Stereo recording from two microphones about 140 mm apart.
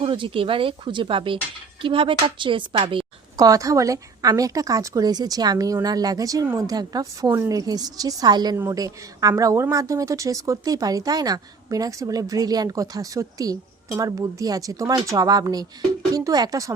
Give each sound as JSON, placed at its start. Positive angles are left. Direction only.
{"t": 0.0, "sound": "a woman's voice", "side_deg": -40}
{"t": 3.4, "sound": "a woman's voice", "side_deg": -25}